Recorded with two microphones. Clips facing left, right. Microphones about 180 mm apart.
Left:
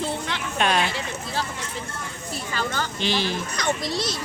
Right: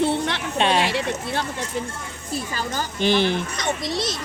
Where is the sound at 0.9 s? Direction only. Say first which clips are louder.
Right 6 dB; 70° right (ahead or behind).